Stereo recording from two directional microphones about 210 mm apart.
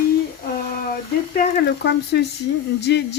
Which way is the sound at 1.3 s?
50° left (ahead or behind).